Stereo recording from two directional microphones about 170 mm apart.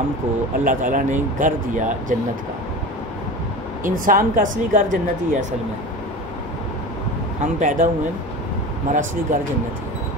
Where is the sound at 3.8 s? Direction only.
55° right (ahead or behind).